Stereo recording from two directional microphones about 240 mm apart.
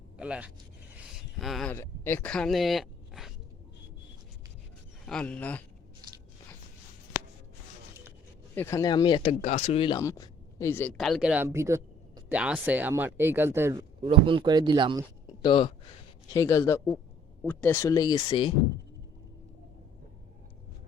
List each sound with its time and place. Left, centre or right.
0.2 s speech: centre
5.0 s speech: centre
8.5 s speech: centre
15.4 s speech: centre